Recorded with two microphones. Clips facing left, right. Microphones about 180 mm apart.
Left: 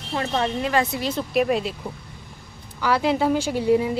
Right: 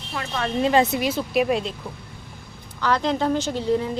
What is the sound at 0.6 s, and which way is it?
Speech, 25° right (ahead or behind).